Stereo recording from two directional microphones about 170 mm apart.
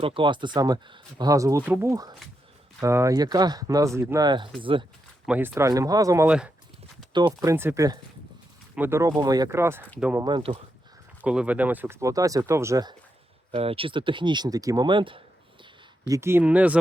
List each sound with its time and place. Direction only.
0.0 s speech: 30° right (ahead or behind)
5.2 s speech: 10° right (ahead or behind)
6.2 s speech: 5° right (ahead or behind)
10.2 s speech: 30° right (ahead or behind)
11.2 s speech: 5° right (ahead or behind)
13.5 s speech: 35° right (ahead or behind)
16.0 s speech: 15° right (ahead or behind)